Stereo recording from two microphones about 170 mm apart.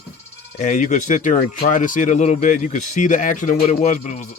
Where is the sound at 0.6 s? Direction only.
45° left (ahead or behind).